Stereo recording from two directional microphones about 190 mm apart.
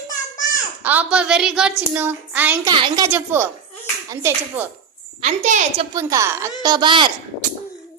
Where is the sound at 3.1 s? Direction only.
10° right (ahead or behind).